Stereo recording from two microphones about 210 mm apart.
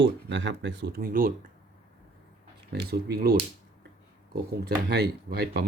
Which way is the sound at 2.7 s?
50° right (ahead or behind).